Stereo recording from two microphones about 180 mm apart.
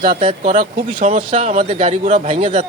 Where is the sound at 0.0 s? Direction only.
30° right (ahead or behind).